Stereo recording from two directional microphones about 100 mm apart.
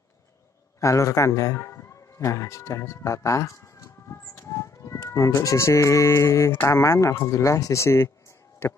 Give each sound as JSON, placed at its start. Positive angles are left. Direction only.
{"t": 0.7, "sound": "a man's voice", "side_deg": 30}